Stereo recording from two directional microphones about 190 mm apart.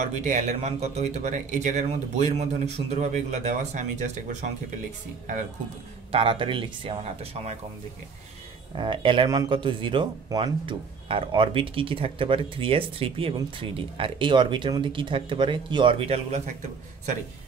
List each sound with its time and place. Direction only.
0.0 s speech: 40° right (ahead or behind)
6.1 s speech: 25° right (ahead or behind)
8.7 s speech: 25° right (ahead or behind)